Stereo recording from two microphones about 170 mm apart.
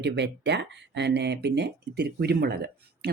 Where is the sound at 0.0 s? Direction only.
90° right.